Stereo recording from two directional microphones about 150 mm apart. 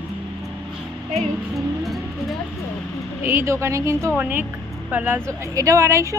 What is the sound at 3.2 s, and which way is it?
A woman's voice, 15° right (ahead or behind).